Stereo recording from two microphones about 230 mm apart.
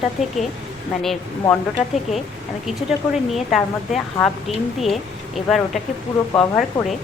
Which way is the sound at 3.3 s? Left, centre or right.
Centre.